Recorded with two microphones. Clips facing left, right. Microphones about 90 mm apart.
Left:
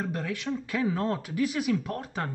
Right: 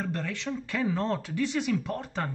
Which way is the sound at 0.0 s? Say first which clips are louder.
Left 1 dB; 10° left (ahead or behind).